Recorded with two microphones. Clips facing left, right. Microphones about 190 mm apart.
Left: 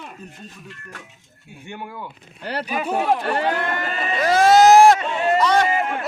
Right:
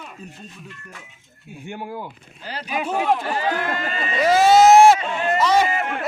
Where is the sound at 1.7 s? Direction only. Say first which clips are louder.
Right 3 dB; 30° right (ahead or behind).